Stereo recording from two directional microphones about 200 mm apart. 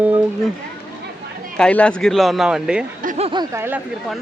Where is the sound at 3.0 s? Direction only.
40° right (ahead or behind).